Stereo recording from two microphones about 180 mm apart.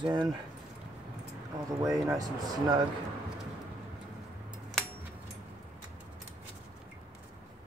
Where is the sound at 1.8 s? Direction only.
20° right (ahead or behind).